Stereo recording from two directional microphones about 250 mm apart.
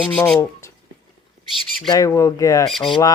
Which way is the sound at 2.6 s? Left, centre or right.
Centre.